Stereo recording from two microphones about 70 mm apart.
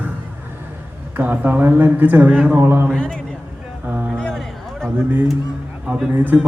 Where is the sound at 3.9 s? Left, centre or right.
Right.